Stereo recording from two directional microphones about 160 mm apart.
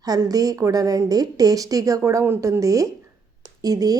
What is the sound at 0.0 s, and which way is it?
A woman's voice, 25° right (ahead or behind).